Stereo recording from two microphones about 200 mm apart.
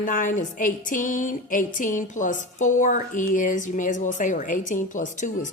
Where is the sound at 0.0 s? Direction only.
40° left (ahead or behind).